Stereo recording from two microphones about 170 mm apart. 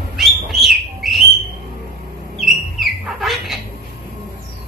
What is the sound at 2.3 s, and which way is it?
Bird, centre (ahead or behind).